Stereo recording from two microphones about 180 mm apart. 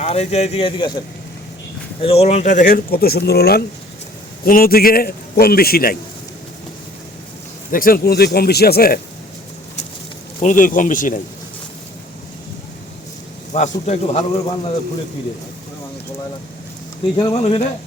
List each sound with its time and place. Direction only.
0.0 s a man's voice: 35° left (ahead or behind)
2.0 s a man's voice: 35° left (ahead or behind); by 6.0 s 55° left (ahead or behind)
7.7 s a man's voice: 50° left (ahead or behind)
10.4 s speech: 45° left (ahead or behind)
13.5 s a man's voice: 40° left (ahead or behind)
17.2 s speech: 25° left (ahead or behind)
17.4 s a man's voice: 40° left (ahead or behind)